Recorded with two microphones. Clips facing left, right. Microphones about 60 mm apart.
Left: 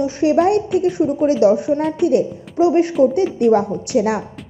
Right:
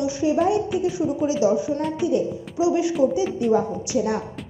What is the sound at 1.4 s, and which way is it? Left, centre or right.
A woman's voice, left.